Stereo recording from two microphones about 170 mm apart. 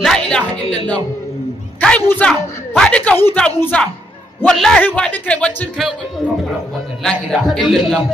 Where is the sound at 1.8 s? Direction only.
5° left (ahead or behind).